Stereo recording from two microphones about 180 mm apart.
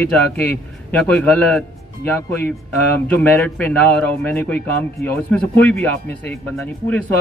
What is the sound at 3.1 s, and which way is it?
Speech, 10° left (ahead or behind).